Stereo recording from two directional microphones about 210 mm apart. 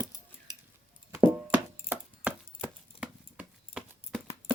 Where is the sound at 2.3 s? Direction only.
5° right (ahead or behind).